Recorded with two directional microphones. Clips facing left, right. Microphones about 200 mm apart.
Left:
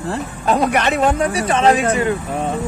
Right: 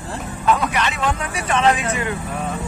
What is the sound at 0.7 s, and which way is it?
A man's voice, 50° left (ahead or behind).